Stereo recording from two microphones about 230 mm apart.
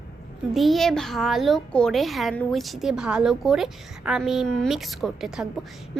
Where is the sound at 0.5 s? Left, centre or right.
Centre.